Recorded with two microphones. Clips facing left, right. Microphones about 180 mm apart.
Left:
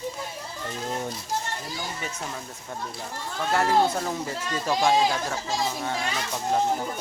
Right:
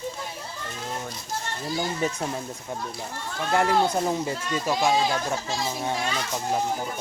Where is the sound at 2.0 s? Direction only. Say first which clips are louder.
Right 9 dB; 40° right (ahead or behind).